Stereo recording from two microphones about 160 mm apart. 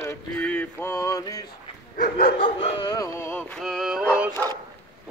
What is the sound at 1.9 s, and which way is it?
Dog, 60° left (ahead or behind).